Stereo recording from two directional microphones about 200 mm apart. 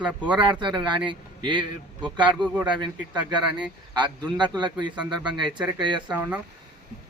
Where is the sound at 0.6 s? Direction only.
25° right (ahead or behind).